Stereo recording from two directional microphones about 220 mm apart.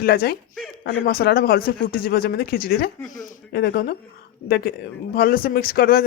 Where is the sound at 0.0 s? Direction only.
45° left (ahead or behind).